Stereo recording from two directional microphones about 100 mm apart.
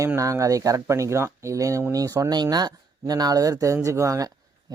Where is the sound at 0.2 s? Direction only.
35° right (ahead or behind).